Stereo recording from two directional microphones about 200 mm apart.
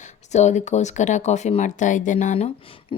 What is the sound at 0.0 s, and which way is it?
Speech, 35° left (ahead or behind).